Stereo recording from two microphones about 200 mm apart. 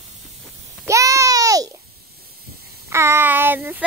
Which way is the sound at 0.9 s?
15° right (ahead or behind).